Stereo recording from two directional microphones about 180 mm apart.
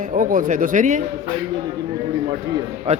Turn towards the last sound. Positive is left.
turn(degrees=-35)  # may be behind; listen again after turning